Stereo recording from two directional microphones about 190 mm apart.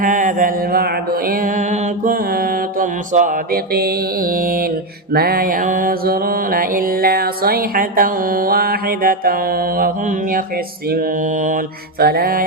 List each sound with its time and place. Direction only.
0.0 s mantra: 45° right (ahead or behind)